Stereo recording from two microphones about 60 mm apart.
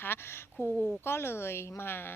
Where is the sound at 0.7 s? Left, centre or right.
Centre.